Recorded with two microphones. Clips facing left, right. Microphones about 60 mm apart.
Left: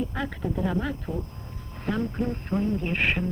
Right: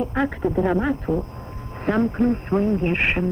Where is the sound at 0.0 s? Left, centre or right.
Right.